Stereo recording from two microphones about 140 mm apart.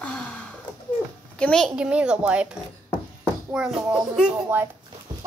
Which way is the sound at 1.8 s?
10° right (ahead or behind).